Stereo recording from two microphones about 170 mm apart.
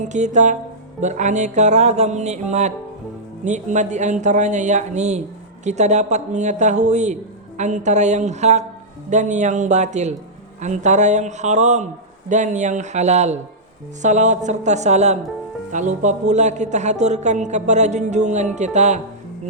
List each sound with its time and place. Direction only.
0.0 s a man's voice: 45° right (ahead or behind)